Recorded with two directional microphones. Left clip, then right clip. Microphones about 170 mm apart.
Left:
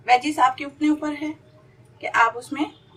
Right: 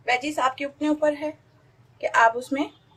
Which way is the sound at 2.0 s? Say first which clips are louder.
Right 1 dB; 55° right (ahead or behind).